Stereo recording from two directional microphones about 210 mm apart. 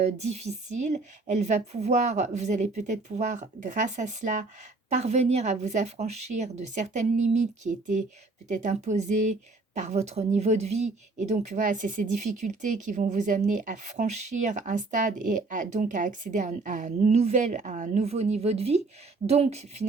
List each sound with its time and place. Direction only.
0.0 s speech: 35° right (ahead or behind)